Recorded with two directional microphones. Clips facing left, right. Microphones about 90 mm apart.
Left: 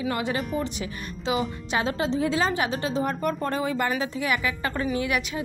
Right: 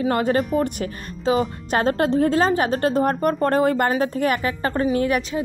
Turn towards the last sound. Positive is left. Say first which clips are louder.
# right 6 dB
turn(degrees=-40)  # may be behind; listen again after turning